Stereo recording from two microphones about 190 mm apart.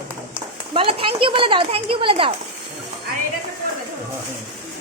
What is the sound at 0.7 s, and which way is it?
Speech, 30° right (ahead or behind).